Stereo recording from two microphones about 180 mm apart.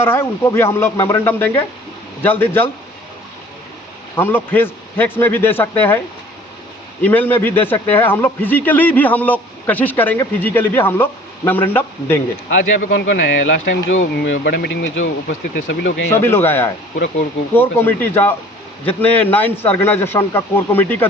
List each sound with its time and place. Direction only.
0.0 s speech: 15° left (ahead or behind)
4.1 s speech: 10° left (ahead or behind)
7.0 s speech: 10° left (ahead or behind)
12.9 s speech: 90° left
15.5 s speech: 60° left (ahead or behind)
16.1 s speech: 15° left (ahead or behind)